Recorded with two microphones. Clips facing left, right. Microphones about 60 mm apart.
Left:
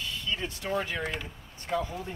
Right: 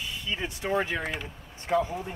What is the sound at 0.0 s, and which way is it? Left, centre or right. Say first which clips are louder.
Speech: right 1 dB; centre.